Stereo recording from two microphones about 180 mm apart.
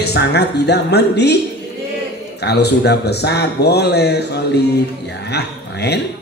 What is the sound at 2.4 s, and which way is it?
Mantra, 65° left (ahead or behind).